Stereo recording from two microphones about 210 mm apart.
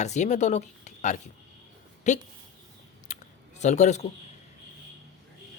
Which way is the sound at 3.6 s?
35° left (ahead or behind).